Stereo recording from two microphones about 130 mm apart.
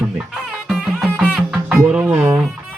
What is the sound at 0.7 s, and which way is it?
Music, 5° right (ahead or behind).